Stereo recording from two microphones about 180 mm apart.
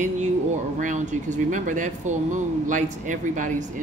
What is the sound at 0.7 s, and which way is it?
Speech, 45° right (ahead or behind).